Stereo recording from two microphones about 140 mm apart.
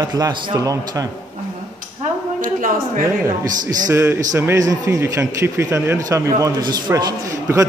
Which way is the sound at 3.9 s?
20° right (ahead or behind).